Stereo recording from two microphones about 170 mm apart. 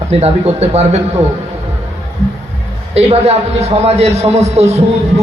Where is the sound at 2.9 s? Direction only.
40° right (ahead or behind).